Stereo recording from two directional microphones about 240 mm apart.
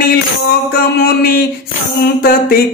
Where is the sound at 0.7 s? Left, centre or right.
Left.